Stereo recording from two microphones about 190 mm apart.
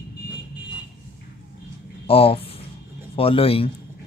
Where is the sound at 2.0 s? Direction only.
30° left (ahead or behind).